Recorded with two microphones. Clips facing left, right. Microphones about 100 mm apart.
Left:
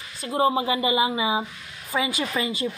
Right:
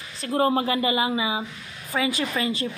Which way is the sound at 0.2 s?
10° left (ahead or behind).